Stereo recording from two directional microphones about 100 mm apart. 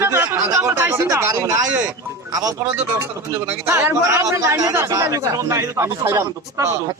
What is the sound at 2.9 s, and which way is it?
A man's voice, 25° right (ahead or behind).